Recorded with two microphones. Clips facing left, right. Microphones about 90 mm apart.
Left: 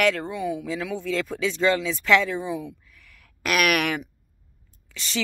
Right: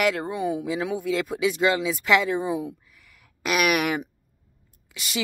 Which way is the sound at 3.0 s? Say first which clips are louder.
Even; 5° right (ahead or behind).